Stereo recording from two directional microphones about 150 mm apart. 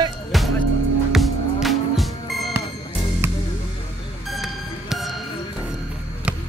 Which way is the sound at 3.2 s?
15° right (ahead or behind).